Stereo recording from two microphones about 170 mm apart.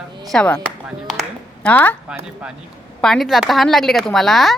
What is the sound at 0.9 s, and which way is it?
Music, centre (ahead or behind).